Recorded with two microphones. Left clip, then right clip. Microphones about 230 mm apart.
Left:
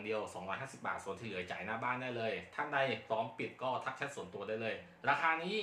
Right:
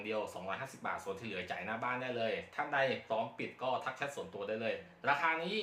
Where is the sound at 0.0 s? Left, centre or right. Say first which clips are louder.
Right 1 dB; centre.